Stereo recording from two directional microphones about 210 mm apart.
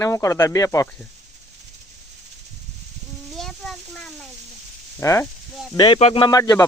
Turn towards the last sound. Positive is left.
turn(degrees=15)  # may be behind; listen again after turning